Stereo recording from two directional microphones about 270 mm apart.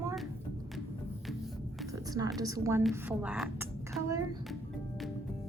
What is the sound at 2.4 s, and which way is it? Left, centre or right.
A woman's voice, centre.